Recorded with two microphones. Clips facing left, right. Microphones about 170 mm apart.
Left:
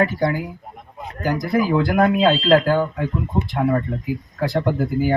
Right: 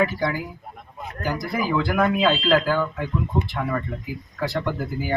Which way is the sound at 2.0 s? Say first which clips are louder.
Left 5 dB; 40° left (ahead or behind).